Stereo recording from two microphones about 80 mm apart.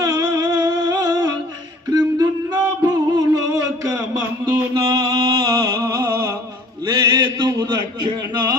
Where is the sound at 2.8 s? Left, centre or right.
Right.